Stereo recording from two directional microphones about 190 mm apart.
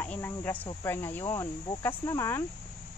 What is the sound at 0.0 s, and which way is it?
Speech, 10° left (ahead or behind).